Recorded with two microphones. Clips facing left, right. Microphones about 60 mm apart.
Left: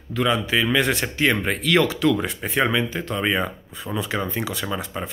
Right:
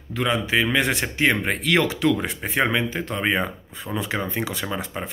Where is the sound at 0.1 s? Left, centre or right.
Right.